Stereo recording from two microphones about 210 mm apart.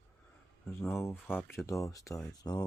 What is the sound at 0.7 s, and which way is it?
Speech, centre (ahead or behind).